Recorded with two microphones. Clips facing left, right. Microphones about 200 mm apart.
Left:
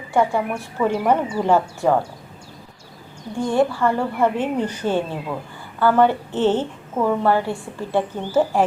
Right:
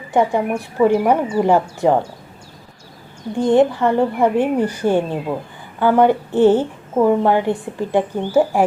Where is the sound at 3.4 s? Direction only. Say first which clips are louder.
Right 5 dB; 20° right (ahead or behind).